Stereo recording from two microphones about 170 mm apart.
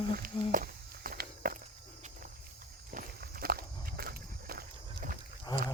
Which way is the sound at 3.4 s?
65° right (ahead or behind).